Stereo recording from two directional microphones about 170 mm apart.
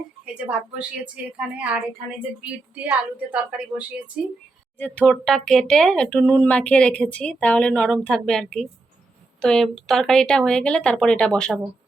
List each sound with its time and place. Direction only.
0.8 s speech: 5° right (ahead or behind)
4.8 s speech: 5° left (ahead or behind)